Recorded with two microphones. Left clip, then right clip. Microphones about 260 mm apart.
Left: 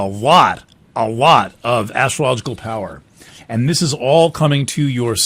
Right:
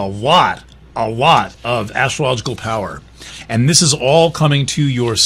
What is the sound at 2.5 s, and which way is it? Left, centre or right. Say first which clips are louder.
Speech: right 3 dB; left.